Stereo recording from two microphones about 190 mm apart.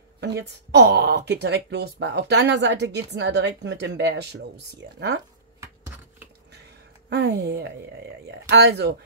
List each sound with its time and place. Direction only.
0.2 s speech: 65° right (ahead or behind)
7.1 s speech: 60° right (ahead or behind)